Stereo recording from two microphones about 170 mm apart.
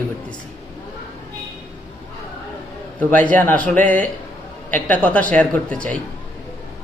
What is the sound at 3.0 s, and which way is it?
Speech, 10° left (ahead or behind).